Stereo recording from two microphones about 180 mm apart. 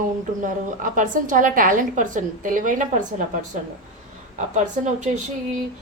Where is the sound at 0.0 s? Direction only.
45° right (ahead or behind).